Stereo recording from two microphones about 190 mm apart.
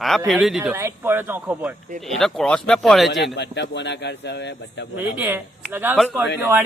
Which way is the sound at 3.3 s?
65° left (ahead or behind).